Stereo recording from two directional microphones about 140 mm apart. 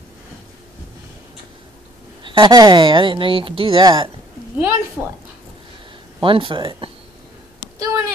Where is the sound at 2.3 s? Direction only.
35° right (ahead or behind).